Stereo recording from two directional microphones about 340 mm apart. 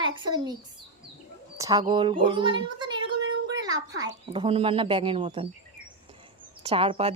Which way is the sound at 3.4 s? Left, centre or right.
Centre.